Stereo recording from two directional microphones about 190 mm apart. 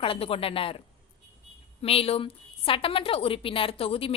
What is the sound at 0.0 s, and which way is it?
Speech, 30° left (ahead or behind).